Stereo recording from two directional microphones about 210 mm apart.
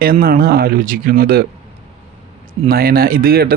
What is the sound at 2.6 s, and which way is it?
Speech, 45° right (ahead or behind).